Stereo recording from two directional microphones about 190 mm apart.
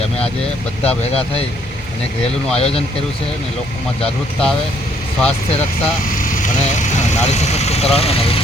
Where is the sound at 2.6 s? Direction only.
30° left (ahead or behind).